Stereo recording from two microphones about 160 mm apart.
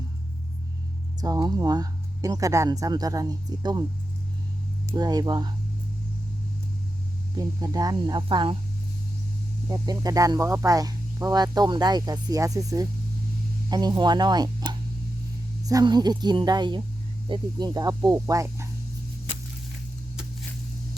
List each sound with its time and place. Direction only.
1.2 s speech: 25° right (ahead or behind)
4.9 s speech: 25° right (ahead or behind)
7.3 s speech: 25° right (ahead or behind)
9.6 s speech: 25° right (ahead or behind)